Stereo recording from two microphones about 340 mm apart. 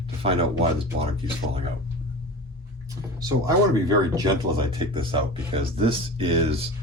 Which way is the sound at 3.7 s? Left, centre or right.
Centre.